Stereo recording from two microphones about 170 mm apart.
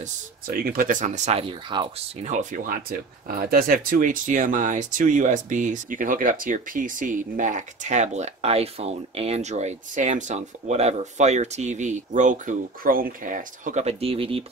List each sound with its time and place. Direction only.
0.0 s speech: 55° right (ahead or behind); by 1.9 s 30° right (ahead or behind)
2.2 s speech: 50° right (ahead or behind)